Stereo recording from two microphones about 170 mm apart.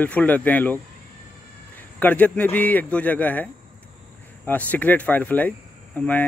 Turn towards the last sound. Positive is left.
turn(degrees=10)  # may be behind; listen again after turning